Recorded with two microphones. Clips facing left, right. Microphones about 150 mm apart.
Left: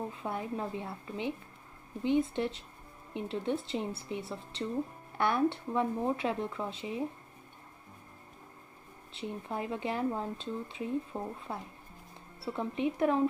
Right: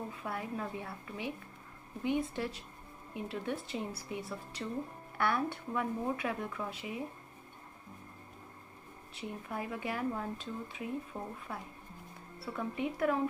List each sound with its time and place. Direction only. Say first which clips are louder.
0.1 s speech: left 3 dB; 25° left (ahead or behind)
9.1 s speech: left 3 dB; 25° left (ahead or behind)
12.5 s speech: left 4 dB; 25° left (ahead or behind)